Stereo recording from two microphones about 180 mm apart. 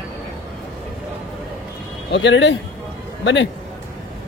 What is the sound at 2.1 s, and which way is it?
A man's voice, 80° left.